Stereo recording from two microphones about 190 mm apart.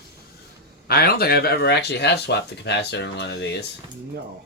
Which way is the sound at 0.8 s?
55° left (ahead or behind).